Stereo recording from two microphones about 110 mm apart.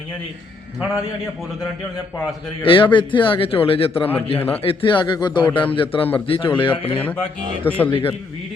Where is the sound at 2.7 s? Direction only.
50° left (ahead or behind).